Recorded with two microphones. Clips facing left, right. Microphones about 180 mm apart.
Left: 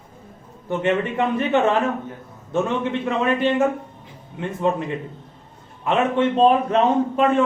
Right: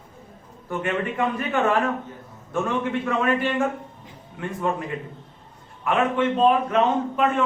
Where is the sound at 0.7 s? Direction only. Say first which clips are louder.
Left 5 dB; 25° left (ahead or behind).